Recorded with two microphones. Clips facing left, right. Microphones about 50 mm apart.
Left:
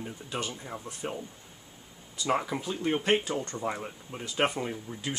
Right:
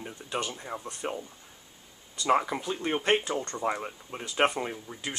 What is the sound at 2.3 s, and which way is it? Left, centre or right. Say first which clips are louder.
Speech: right 4 dB; centre.